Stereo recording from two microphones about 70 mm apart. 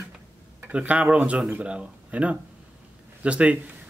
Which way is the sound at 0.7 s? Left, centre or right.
Centre.